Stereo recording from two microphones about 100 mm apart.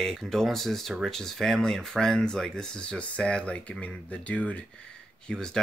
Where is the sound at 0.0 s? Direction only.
5° left (ahead or behind).